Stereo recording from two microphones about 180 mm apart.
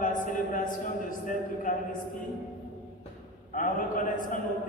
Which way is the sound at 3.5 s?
50° left (ahead or behind).